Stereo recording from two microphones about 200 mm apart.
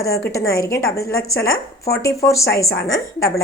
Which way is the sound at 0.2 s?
15° left (ahead or behind).